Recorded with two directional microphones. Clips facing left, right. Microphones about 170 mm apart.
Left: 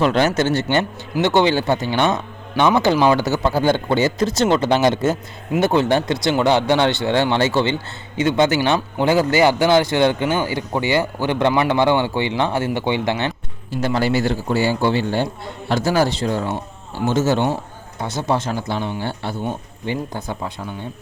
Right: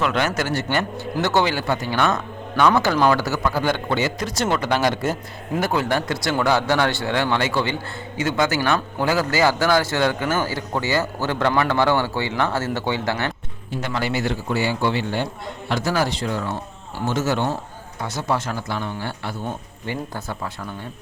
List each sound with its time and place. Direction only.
0.0 s a man's voice: 30° left (ahead or behind)
13.8 s a man's voice: 35° left (ahead or behind); by 20.7 s 20° left (ahead or behind)